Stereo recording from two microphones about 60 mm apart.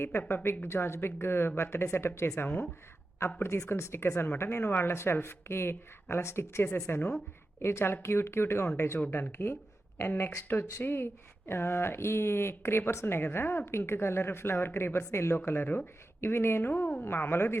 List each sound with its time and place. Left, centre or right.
0.0 s speech: left
0.7 s speech: left